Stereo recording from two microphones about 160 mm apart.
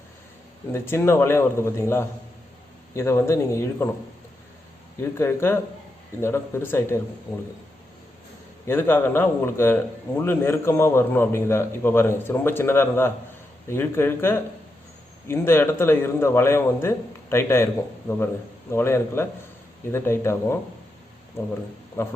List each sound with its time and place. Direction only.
0.7 s a man's voice: 15° left (ahead or behind)
5.1 s a man's voice: 15° left (ahead or behind)
8.6 s a man's voice: 15° left (ahead or behind)
22.0 s a man's voice: 15° left (ahead or behind)